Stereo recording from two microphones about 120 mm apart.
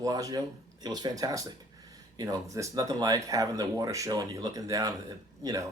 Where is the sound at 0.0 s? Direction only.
30° right (ahead or behind).